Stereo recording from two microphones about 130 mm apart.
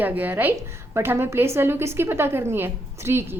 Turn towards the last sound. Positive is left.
turn(degrees=-20)  # may be behind; listen again after turning